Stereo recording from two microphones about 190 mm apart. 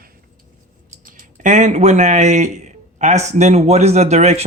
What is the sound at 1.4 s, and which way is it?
A man's voice, 40° right (ahead or behind).